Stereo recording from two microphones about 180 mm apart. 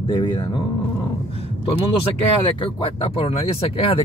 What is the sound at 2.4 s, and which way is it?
Speech, 30° left (ahead or behind).